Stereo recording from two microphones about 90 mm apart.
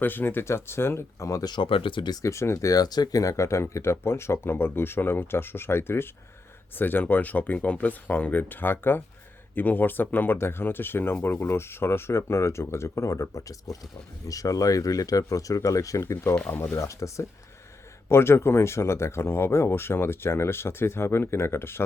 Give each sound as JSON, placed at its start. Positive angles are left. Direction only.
{"t": 0.0, "sound": "speech", "side_deg": 20}
{"t": 1.5, "sound": "speech", "side_deg": 65}
{"t": 2.1, "sound": "speech", "side_deg": 35}
{"t": 16.3, "sound": "speech", "side_deg": 15}
{"t": 16.7, "sound": "speech", "side_deg": 35}